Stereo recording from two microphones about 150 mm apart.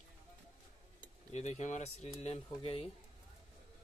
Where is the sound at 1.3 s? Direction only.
50° left (ahead or behind).